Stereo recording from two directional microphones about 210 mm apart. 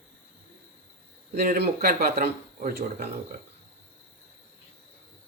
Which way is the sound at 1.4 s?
50° right (ahead or behind).